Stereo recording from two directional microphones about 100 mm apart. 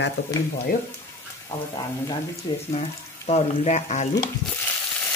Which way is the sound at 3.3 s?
90° left.